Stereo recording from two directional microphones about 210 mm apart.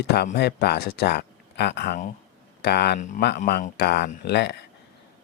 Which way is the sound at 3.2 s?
50° left (ahead or behind).